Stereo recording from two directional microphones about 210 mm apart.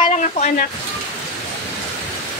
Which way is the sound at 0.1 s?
35° left (ahead or behind).